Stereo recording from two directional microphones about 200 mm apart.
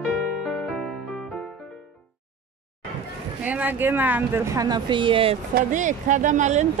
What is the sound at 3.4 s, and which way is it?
Speech, 10° right (ahead or behind).